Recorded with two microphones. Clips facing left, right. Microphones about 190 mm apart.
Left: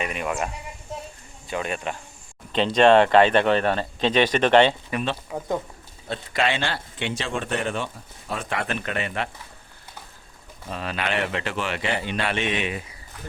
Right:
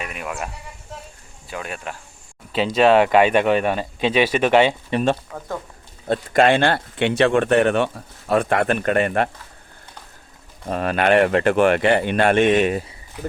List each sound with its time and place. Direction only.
0.0 s speech: centre (ahead or behind)
4.9 s speech: 30° right (ahead or behind)
5.3 s speech: 15° left (ahead or behind)
6.1 s speech: 50° right (ahead or behind)
10.7 s speech: 50° right (ahead or behind)